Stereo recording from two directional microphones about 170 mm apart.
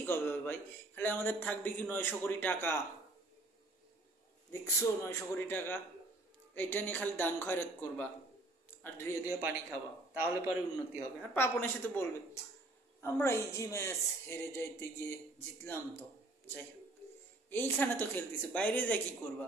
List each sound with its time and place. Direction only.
0.0 s a man's voice: 10° left (ahead or behind)
5.0 s a man's voice: 15° left (ahead or behind)
9.4 s a man's voice: 15° right (ahead or behind)
11.3 s a man's voice: 10° left (ahead or behind)